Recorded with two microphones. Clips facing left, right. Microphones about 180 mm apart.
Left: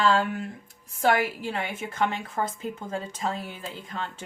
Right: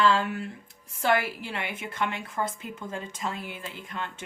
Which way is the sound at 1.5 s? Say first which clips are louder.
Left 3 dB; 35° left (ahead or behind).